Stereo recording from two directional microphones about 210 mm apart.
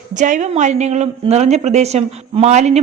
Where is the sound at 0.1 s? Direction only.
35° right (ahead or behind).